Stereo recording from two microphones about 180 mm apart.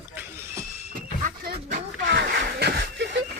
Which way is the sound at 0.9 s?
55° right (ahead or behind).